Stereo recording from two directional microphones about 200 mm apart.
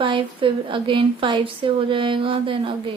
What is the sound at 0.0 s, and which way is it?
Speech, 25° right (ahead or behind).